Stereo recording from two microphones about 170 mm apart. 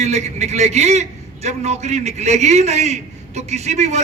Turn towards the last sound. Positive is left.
turn(degrees=-40)  # may be behind; listen again after turning